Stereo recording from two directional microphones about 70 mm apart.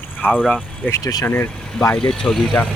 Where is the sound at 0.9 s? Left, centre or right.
Left.